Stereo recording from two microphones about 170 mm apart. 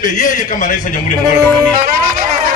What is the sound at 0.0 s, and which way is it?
A man's voice, 50° left (ahead or behind).